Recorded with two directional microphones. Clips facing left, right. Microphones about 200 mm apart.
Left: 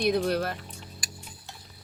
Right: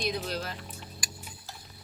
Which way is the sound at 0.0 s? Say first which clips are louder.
Left 8 dB; 55° left (ahead or behind).